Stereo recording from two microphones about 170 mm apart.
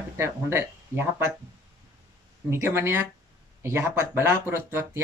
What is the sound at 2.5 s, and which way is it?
Speech, 15° right (ahead or behind).